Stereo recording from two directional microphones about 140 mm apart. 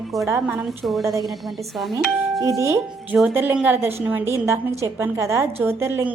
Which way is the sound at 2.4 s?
20° right (ahead or behind).